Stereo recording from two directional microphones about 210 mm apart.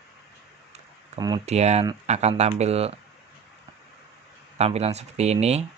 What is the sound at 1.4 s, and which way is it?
Speech, 30° right (ahead or behind).